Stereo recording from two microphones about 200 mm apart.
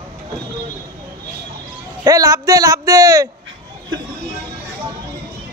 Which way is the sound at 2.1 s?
15° right (ahead or behind).